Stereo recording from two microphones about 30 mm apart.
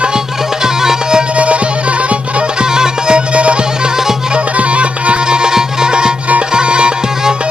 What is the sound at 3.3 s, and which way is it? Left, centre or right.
Music, right.